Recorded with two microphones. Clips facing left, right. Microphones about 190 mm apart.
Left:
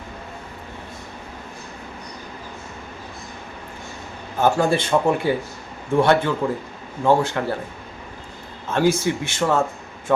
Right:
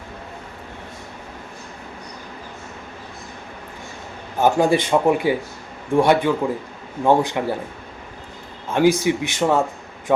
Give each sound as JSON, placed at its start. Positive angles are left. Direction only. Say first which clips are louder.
{"t": 4.4, "sound": "speech", "louder": "right 2 dB", "side_deg": -15}
{"t": 8.7, "sound": "speech", "louder": "right 3 dB", "side_deg": -15}